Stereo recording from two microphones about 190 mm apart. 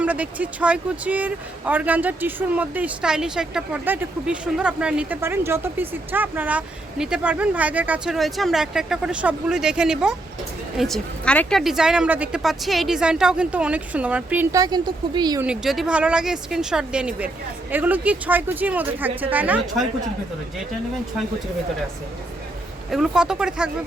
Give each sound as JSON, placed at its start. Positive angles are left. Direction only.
{"t": 0.0, "sound": "a woman's voice", "side_deg": -5}
{"t": 14.6, "sound": "speech", "side_deg": -25}
{"t": 15.4, "sound": "a woman's voice", "side_deg": -5}
{"t": 22.9, "sound": "a woman's voice", "side_deg": 0}